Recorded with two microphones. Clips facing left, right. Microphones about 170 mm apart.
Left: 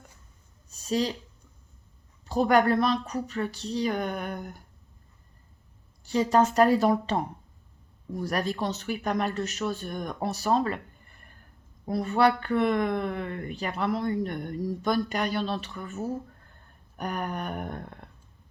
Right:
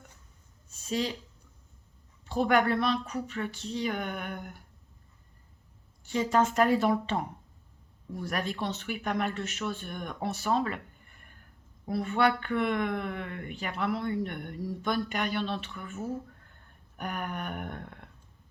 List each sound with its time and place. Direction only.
0.7 s a sound: 40° left (ahead or behind)
2.2 s speech: 40° left (ahead or behind)
6.1 s speech: 35° left (ahead or behind)
11.9 s speech: 40° left (ahead or behind)